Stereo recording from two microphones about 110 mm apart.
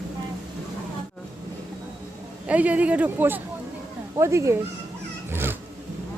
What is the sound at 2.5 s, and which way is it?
Speech, 15° right (ahead or behind).